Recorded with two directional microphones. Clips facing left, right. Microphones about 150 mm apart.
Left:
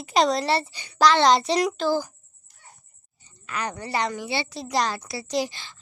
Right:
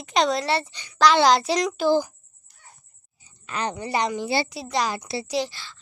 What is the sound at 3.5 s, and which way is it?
Speech, 25° right (ahead or behind).